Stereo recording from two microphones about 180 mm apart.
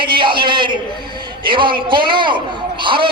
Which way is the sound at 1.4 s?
25° right (ahead or behind).